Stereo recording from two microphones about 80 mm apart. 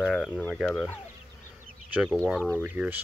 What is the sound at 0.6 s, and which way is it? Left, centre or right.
Speech, centre.